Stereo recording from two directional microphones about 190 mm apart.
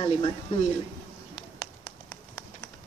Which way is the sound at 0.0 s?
25° left (ahead or behind).